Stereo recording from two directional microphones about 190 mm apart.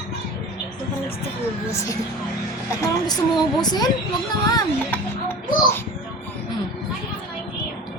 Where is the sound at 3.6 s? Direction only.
20° left (ahead or behind).